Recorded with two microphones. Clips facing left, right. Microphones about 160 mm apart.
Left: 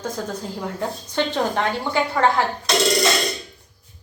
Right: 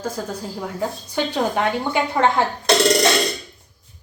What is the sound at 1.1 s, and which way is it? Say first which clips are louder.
Speech: even; 10° right (ahead or behind).